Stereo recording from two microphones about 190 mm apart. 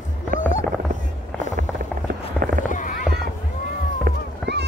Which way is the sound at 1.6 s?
50° right (ahead or behind).